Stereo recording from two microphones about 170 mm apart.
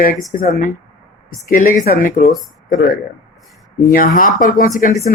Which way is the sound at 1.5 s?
50° left (ahead or behind).